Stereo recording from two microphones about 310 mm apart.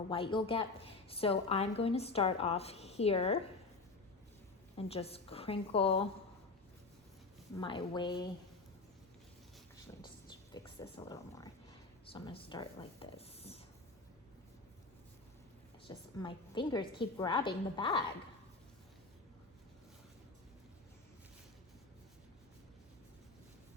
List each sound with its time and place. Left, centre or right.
0.1 s a woman's voice: centre
4.8 s a woman's voice: centre
7.6 s a woman's voice: centre
10.5 s a sound: centre
16.1 s a woman's voice: centre